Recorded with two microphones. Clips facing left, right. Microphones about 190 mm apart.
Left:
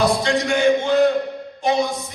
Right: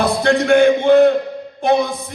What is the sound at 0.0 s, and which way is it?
A man's voice, 55° right (ahead or behind).